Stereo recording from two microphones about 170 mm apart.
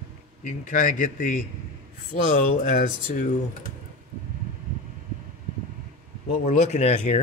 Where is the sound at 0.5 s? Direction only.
50° left (ahead or behind).